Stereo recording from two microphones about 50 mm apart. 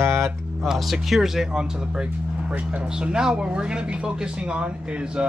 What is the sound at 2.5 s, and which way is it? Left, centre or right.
Speech, right.